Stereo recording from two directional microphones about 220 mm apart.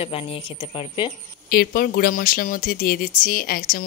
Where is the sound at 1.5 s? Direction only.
40° left (ahead or behind).